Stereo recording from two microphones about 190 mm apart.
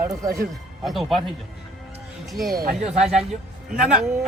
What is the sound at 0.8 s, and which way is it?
A man's voice, centre (ahead or behind).